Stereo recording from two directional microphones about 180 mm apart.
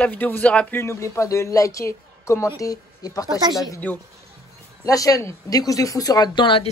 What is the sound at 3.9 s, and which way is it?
A man's voice, 10° left (ahead or behind).